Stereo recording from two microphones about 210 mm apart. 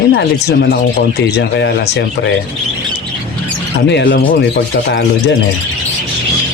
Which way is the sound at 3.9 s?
55° left (ahead or behind).